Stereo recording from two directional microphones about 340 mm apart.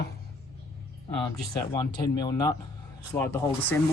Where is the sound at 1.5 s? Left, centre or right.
Centre.